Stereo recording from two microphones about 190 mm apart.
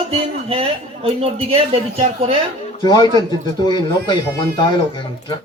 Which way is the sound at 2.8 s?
20° left (ahead or behind).